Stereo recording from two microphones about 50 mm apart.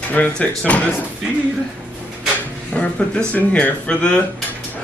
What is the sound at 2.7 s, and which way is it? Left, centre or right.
Speech, left.